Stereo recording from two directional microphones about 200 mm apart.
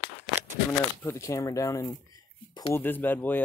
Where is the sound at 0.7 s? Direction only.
15° left (ahead or behind).